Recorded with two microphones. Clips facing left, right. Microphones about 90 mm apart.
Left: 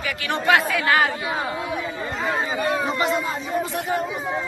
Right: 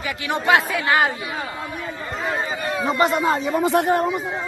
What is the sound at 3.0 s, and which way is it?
Speech, 65° right (ahead or behind).